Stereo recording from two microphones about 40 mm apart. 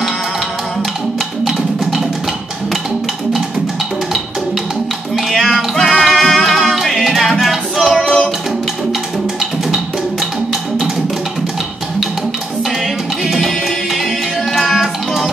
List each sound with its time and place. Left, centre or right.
5.3 s music: centre
8.0 s music: centre
12.8 s music: centre